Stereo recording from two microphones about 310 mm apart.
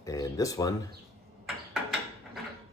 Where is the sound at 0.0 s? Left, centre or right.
Centre.